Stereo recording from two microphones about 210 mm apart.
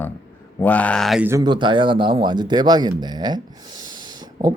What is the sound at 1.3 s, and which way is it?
Speech, 20° right (ahead or behind).